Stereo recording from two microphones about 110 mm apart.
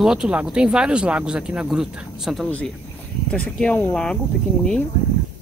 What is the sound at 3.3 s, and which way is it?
Speech, 10° left (ahead or behind).